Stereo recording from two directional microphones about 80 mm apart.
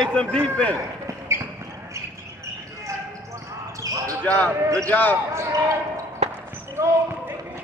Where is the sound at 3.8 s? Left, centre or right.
Right.